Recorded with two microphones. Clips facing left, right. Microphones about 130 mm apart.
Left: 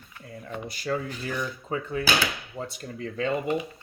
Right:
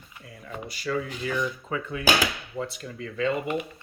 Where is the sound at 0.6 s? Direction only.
45° left (ahead or behind).